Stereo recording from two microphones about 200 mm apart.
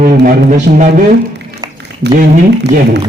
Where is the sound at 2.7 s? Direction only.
45° right (ahead or behind).